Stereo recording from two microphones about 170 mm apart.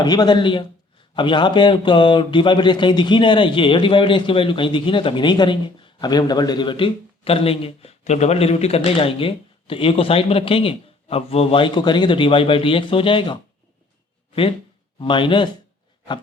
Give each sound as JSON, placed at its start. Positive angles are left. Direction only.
{"t": 0.0, "sound": "speech", "side_deg": 25}
{"t": 14.9, "sound": "speech", "side_deg": 30}